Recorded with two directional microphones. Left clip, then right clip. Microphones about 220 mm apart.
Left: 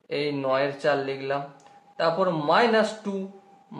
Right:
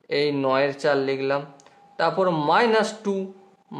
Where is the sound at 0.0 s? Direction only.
35° right (ahead or behind).